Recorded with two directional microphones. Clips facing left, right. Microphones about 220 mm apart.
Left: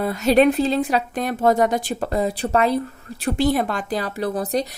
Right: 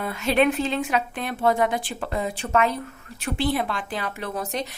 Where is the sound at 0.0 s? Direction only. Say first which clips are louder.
Left 5 dB; 40° left (ahead or behind).